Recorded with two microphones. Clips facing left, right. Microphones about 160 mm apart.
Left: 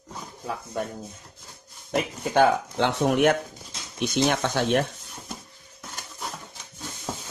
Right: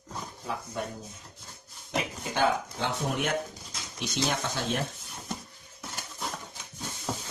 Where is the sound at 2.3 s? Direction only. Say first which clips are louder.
Left 7 dB; 65° left (ahead or behind).